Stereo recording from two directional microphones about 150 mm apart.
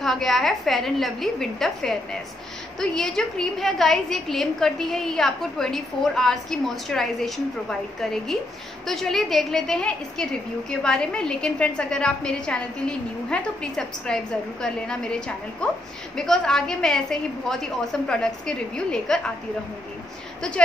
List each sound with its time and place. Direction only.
0.0 s a woman's voice: centre (ahead or behind)
20.4 s a woman's voice: 5° left (ahead or behind)